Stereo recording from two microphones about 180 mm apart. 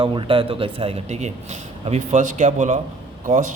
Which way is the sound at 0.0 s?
30° right (ahead or behind).